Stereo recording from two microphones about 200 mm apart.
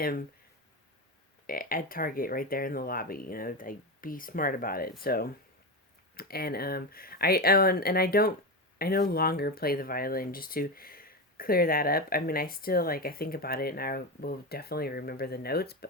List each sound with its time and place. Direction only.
0.0 s speech: 50° left (ahead or behind)
1.5 s speech: 45° left (ahead or behind)